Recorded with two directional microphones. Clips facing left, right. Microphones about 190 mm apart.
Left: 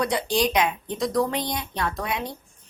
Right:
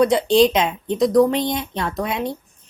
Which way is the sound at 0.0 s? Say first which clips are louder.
Right 9 dB; 25° right (ahead or behind).